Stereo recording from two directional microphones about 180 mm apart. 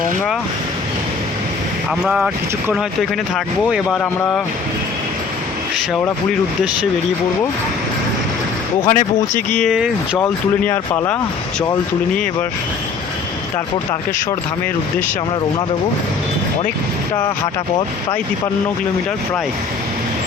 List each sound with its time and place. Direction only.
2.0 s speech: 5° right (ahead or behind)
9.0 s speech: 45° left (ahead or behind)
9.6 s speech: centre (ahead or behind)
10.2 s speech: 10° left (ahead or behind)